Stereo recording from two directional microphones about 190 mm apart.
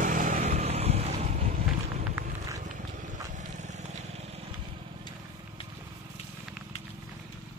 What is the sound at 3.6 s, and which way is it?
Vehicle, 40° right (ahead or behind).